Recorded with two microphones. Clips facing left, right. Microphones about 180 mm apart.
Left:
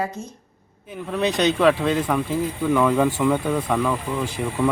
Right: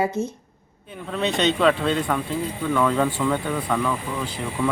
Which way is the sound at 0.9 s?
Centre (ahead or behind).